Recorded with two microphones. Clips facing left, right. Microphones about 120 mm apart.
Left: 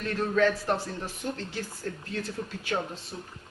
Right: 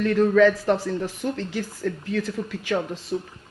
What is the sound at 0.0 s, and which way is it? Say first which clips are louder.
A man's voice: right 8 dB; 90° right.